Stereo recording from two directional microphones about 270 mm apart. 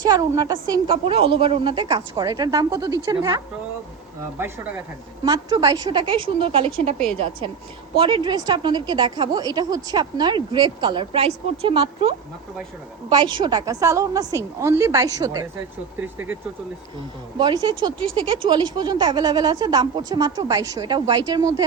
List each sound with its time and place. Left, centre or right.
0.0 s speech: centre
5.2 s speech: centre
7.9 s speech: centre